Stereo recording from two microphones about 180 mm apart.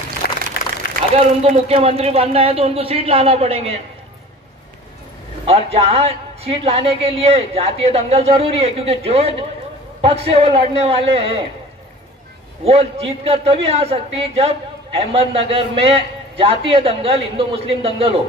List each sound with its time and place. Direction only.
0.2 s a sound: 60° left (ahead or behind)
1.1 s a man's voice: 35° right (ahead or behind)
5.4 s a man's voice: 35° right (ahead or behind)
12.6 s a man's voice: 35° right (ahead or behind)